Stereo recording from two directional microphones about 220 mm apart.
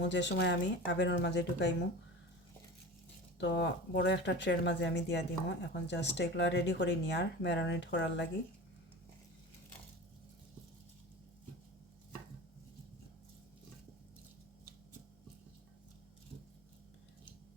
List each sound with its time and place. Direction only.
0.0 s speech: 55° left (ahead or behind)
3.3 s speech: 50° left (ahead or behind)